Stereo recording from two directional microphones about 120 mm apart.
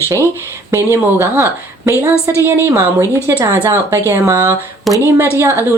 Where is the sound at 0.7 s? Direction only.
25° right (ahead or behind).